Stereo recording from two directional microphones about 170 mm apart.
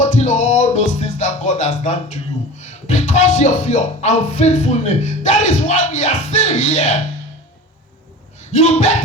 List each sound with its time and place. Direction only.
0.0 s music: 40° left (ahead or behind)
8.4 s speech: 40° left (ahead or behind)